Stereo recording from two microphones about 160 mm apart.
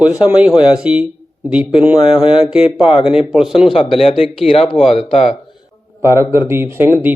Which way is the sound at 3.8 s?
35° left (ahead or behind).